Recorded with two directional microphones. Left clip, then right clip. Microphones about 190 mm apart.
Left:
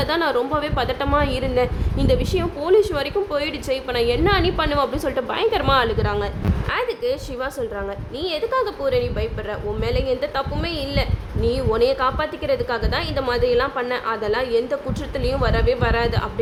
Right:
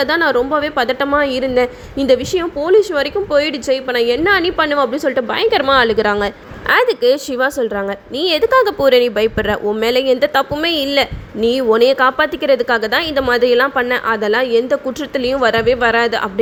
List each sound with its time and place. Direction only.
0.0 s a woman's voice: 25° right (ahead or behind)